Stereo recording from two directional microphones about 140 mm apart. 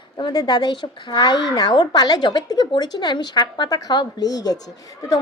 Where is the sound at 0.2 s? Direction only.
30° left (ahead or behind).